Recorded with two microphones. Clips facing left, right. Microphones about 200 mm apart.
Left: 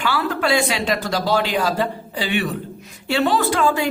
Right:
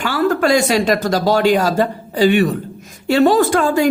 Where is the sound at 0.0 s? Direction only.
45° right (ahead or behind).